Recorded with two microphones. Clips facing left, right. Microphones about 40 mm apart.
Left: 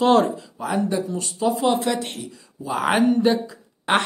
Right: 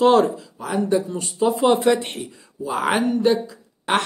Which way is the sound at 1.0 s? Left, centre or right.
Centre.